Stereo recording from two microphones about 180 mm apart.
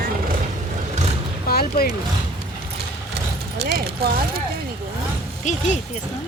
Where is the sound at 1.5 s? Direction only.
55° left (ahead or behind).